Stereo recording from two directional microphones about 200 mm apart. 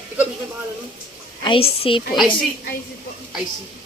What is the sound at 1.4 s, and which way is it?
Speech, 25° left (ahead or behind).